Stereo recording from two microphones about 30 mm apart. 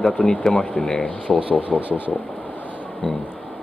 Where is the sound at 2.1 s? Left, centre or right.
Left.